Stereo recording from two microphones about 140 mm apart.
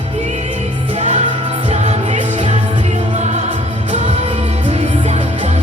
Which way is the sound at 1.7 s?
50° right (ahead or behind).